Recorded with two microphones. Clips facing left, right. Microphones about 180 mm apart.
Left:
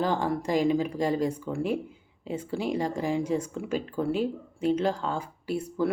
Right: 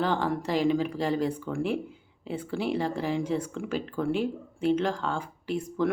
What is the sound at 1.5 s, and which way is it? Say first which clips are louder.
Speech: even; 40° left (ahead or behind).